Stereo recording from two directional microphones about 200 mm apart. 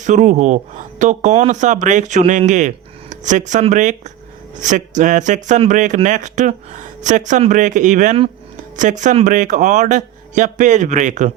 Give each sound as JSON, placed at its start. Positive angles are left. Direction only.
{"t": 0.0, "sound": "speech", "side_deg": -40}